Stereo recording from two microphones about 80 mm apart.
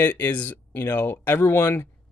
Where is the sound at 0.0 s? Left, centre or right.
Left.